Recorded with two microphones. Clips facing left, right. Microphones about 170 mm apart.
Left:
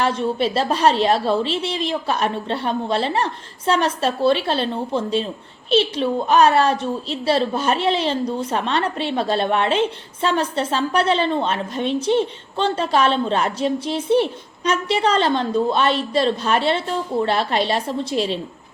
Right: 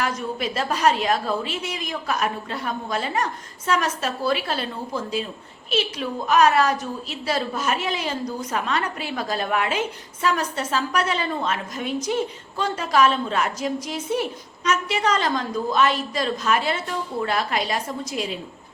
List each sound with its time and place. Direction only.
0.0 s a woman's voice: 30° left (ahead or behind)